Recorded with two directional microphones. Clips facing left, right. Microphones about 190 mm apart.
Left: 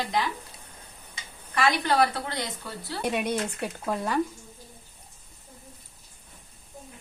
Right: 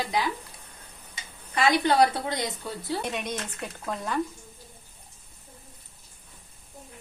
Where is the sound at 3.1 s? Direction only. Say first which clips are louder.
Left 5 dB; 10° left (ahead or behind).